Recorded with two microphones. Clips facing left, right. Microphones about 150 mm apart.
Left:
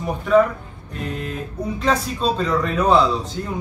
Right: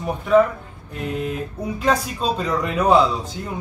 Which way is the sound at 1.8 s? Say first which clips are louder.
Even; 10° right (ahead or behind).